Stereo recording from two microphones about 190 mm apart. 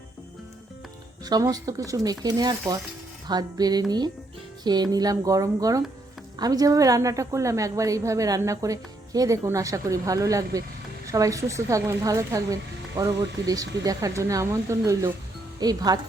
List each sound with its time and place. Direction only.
1.2 s a woman's voice: 20° right (ahead or behind)